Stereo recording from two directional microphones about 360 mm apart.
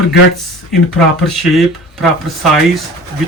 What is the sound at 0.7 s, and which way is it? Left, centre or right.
Speech, centre.